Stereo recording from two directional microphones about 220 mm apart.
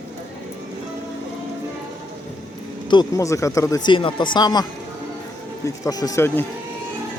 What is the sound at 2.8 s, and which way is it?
Speech, 15° left (ahead or behind).